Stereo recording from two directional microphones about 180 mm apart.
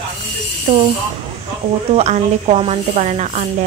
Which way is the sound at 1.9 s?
35° right (ahead or behind).